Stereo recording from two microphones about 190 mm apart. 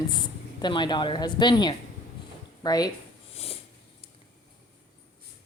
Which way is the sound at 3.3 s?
30° left (ahead or behind).